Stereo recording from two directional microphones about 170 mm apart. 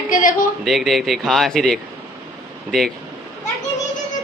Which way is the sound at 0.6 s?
Centre (ahead or behind).